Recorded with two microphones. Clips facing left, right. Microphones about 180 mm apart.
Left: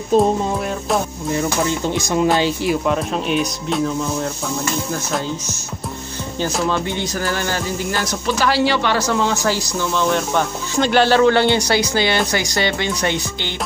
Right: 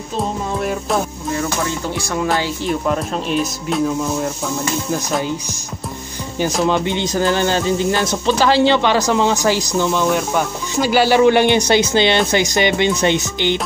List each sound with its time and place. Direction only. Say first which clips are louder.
0.6 s speech: right 1 dB; centre (ahead or behind)
1.9 s speech: left 3 dB; 20° left (ahead or behind)
2.7 s speech: even; centre (ahead or behind)
6.6 s speech: right 5 dB; 20° right (ahead or behind)